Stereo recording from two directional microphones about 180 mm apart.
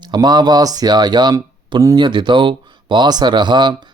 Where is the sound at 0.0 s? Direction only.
25° right (ahead or behind).